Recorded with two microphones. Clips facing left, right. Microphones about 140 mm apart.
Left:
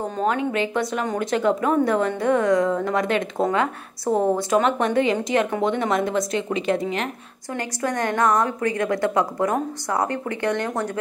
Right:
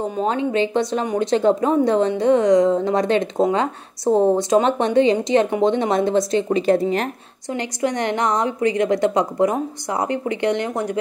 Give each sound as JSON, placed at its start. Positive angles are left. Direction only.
{"t": 0.2, "sound": "a woman's voice", "side_deg": -25}
{"t": 7.5, "sound": "a woman's voice", "side_deg": -20}